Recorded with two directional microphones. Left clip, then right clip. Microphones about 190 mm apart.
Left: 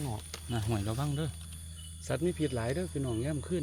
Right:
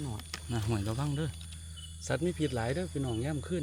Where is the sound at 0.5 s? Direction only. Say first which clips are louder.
Even; centre (ahead or behind).